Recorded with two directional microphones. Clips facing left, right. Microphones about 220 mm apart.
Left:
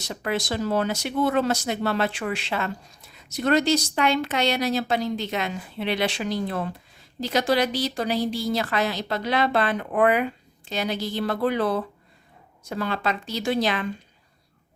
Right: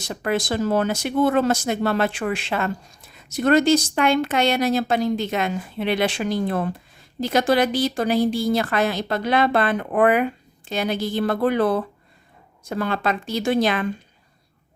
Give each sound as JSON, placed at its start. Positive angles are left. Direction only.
{"t": 0.0, "sound": "speech", "side_deg": -50}